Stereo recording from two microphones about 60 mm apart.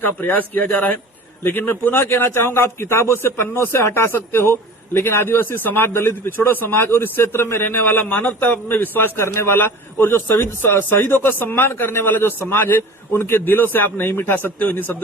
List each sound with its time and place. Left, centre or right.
0.0 s a man's voice: left